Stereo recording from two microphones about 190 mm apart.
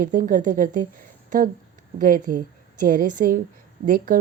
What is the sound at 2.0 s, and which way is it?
Speech, 45° right (ahead or behind).